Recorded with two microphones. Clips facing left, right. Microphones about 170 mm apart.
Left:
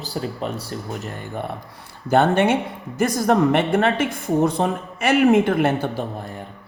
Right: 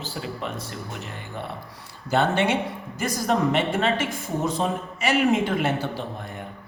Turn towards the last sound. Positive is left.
turn(degrees=55)  # may be behind; listen again after turning